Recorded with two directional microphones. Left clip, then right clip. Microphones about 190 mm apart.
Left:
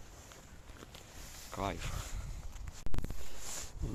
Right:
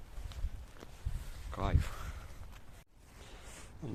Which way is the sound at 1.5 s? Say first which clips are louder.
Left 1 dB; 10° left (ahead or behind).